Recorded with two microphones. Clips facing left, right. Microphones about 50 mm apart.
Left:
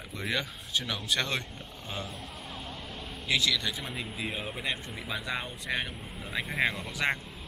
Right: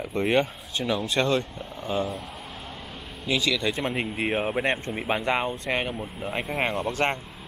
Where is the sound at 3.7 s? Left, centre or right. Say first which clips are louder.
Right 9 dB; right.